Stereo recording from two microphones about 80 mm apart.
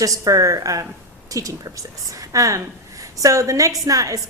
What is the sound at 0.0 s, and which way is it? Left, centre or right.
A woman's voice, right.